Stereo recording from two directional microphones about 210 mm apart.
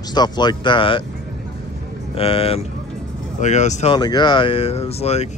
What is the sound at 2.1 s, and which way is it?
Speech, 25° left (ahead or behind).